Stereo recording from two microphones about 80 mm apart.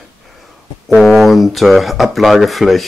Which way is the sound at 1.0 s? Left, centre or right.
Centre.